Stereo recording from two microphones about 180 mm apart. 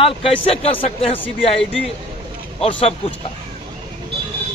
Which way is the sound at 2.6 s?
35° left (ahead or behind).